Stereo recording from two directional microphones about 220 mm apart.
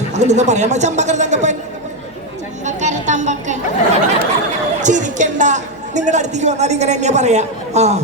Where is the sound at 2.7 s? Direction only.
30° right (ahead or behind).